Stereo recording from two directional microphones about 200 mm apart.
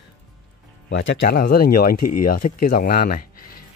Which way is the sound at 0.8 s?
55° left (ahead or behind).